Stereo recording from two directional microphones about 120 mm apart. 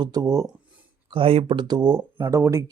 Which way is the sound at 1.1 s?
50° right (ahead or behind).